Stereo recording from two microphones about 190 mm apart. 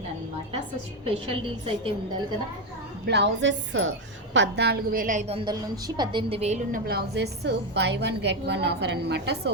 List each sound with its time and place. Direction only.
1.0 s a woman's voice: 30° right (ahead or behind)
3.1 s a woman's voice: 65° right (ahead or behind)
4.4 s a woman's voice: 65° right (ahead or behind)